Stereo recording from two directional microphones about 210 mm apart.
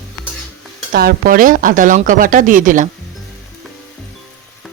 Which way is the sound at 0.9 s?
45° right (ahead or behind).